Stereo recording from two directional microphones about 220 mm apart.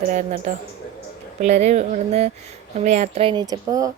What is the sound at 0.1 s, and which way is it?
A woman's voice, 35° right (ahead or behind).